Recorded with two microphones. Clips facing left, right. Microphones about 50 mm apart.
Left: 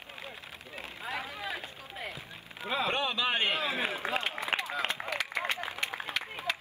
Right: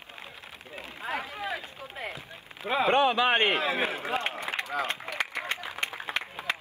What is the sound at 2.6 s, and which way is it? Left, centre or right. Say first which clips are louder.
Speech: right 6 dB; right.